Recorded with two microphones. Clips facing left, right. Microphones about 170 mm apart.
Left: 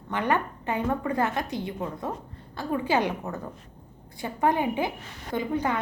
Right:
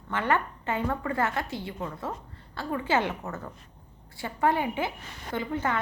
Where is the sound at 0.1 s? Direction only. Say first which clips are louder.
Left 1 dB; 15° left (ahead or behind).